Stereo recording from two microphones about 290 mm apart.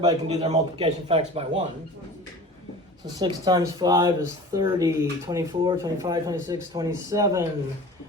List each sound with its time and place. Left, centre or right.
0.0 s speech: right
3.2 s speech: centre